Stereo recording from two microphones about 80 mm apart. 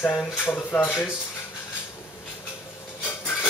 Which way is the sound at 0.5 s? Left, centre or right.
Left.